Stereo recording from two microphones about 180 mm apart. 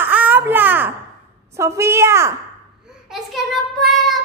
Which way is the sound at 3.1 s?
Centre (ahead or behind).